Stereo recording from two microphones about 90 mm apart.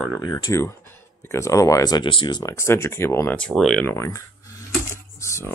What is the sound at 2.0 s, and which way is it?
Speech, 65° left (ahead or behind).